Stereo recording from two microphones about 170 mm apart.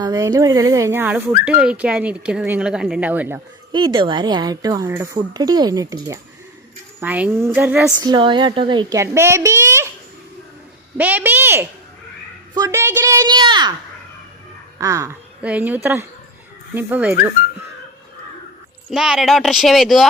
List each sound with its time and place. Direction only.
0.0 s speech: 20° right (ahead or behind)
3.7 s speech: 25° right (ahead or behind)
7.0 s speech: 10° right (ahead or behind)
8.0 s speech: 25° right (ahead or behind)
10.9 s speech: 10° right (ahead or behind); by 13.7 s 25° right (ahead or behind)
14.8 s speech: 20° right (ahead or behind)
18.9 s speech: 5° right (ahead or behind)